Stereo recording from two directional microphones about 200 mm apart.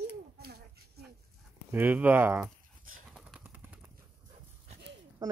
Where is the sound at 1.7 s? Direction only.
10° right (ahead or behind).